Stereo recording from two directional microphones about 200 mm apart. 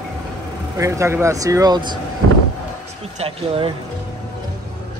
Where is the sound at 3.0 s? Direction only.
30° right (ahead or behind).